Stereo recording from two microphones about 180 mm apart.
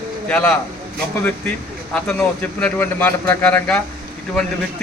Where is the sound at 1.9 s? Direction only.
5° left (ahead or behind).